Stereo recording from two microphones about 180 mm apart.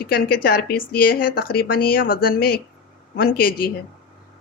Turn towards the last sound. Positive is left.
turn(degrees=55)  # may be behind; listen again after turning